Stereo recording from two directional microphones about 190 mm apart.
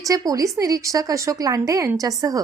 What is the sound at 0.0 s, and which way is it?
A woman's voice, 20° right (ahead or behind).